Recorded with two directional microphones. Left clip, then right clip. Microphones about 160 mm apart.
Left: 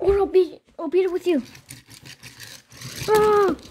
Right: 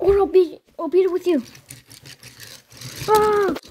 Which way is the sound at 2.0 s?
10° left (ahead or behind).